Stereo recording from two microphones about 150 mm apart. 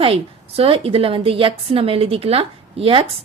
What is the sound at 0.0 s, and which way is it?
A woman's voice, 40° right (ahead or behind).